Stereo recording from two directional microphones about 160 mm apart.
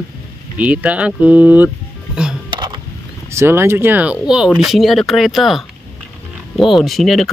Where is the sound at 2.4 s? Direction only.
30° right (ahead or behind).